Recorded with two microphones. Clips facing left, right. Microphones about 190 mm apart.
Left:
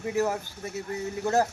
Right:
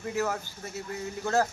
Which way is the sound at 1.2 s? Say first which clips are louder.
Left 2 dB; 15° left (ahead or behind).